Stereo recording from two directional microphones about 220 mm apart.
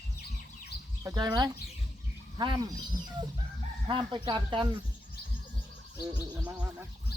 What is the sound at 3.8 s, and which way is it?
Speech, 20° right (ahead or behind).